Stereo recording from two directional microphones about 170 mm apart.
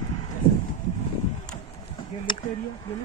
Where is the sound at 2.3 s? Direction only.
30° left (ahead or behind).